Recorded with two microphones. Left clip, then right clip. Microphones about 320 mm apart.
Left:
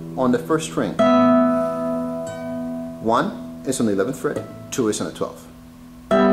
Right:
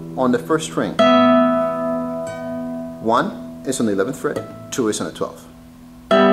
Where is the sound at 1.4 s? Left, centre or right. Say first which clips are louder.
Right 2 dB; centre.